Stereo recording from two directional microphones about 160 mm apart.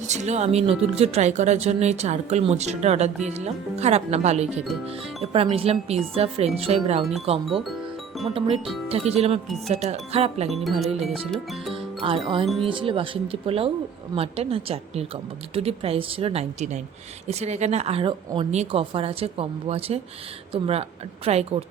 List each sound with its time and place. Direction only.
0.0 s speech: 45° right (ahead or behind)
8.3 s speech: 35° right (ahead or behind)
10.5 s speech: centre (ahead or behind)
12.0 s speech: 30° right (ahead or behind)